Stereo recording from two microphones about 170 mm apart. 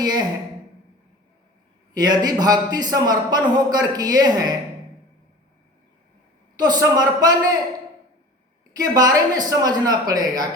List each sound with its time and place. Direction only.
0.0 s a man's voice: 25° right (ahead or behind)
1.9 s a man's voice: 25° right (ahead or behind)
6.6 s a man's voice: 20° right (ahead or behind)
8.7 s a man's voice: 20° right (ahead or behind)